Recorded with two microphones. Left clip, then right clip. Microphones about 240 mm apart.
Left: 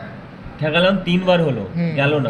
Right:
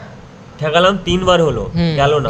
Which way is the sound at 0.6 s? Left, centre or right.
Right.